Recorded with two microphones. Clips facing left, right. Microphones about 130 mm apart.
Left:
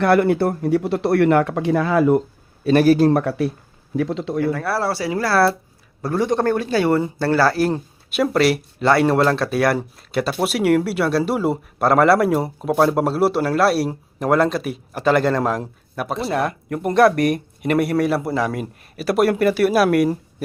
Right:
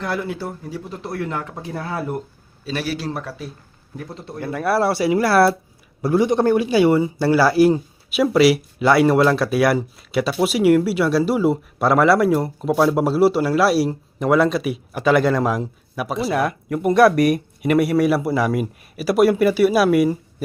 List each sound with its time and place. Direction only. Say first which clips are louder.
0.0 s speech: left 10 dB; 65° left (ahead or behind); by 2.2 s 90° left
2.6 s speech: left 12 dB; 50° left (ahead or behind); by 3.5 s 65° left (ahead or behind)
3.9 s speech: left 11 dB; 90° left
4.5 s a man's voice: right 3 dB; 15° right (ahead or behind); by 20.1 s centre (ahead or behind)